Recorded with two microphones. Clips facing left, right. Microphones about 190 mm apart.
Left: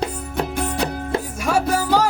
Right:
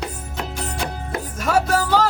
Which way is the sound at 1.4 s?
10° left (ahead or behind).